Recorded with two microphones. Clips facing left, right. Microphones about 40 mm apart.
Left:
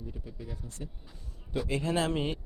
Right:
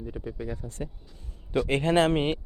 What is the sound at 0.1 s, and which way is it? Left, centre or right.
Speech, right.